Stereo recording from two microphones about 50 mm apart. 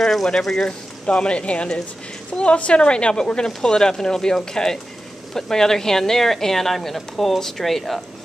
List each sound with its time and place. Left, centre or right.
0.0 s speech: centre
0.7 s speech: centre